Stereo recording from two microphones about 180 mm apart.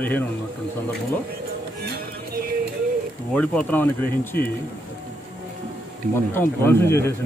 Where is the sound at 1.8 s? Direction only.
60° right (ahead or behind).